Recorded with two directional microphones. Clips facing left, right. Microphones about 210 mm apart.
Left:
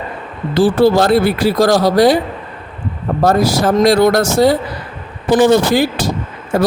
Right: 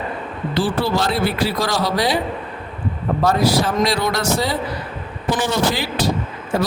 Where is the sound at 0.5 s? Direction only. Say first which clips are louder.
Left 9 dB; 45° left (ahead or behind).